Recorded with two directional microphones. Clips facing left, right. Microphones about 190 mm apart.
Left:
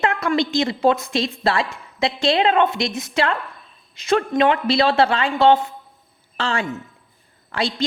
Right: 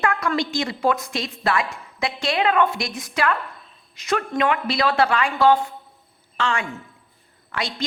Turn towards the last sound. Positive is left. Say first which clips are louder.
# left 5 dB
turn(degrees=30)  # may be behind; listen again after turning